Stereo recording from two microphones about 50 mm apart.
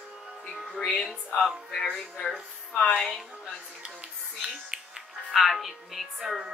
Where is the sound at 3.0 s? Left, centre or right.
Centre.